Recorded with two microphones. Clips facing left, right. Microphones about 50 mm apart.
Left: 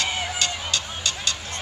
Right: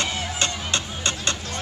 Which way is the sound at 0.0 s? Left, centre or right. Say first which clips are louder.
Even; right.